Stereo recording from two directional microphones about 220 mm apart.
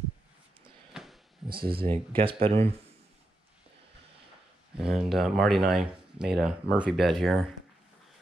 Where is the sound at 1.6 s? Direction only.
25° right (ahead or behind).